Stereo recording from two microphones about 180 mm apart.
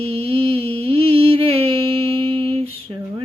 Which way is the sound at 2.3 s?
30° right (ahead or behind).